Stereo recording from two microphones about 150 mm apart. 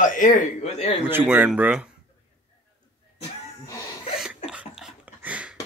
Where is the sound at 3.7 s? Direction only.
20° left (ahead or behind).